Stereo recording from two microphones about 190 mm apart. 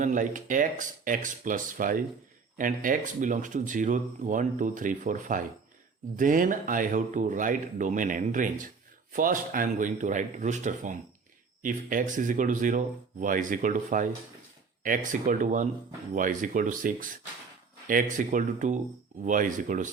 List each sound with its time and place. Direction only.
0.0 s a man's voice: 45° right (ahead or behind)